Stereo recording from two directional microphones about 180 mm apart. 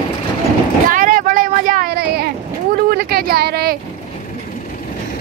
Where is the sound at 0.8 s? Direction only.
50° right (ahead or behind).